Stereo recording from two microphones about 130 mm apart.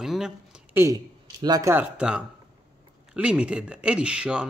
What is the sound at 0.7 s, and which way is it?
Speech, 20° right (ahead or behind).